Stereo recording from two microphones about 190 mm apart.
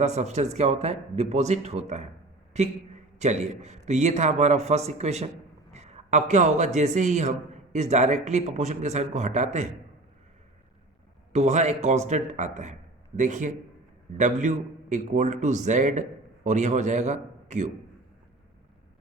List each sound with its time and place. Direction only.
0.0 s a man's voice: 35° right (ahead or behind)
3.2 s a man's voice: 35° right (ahead or behind)
5.7 s a sound: 35° right (ahead or behind)
6.7 s a man's voice: 40° right (ahead or behind)
11.3 s a man's voice: 35° right (ahead or behind)